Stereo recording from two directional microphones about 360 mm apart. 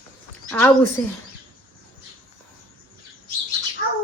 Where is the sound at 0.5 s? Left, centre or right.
Centre.